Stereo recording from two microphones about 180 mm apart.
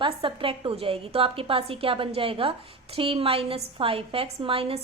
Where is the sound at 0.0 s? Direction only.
30° right (ahead or behind).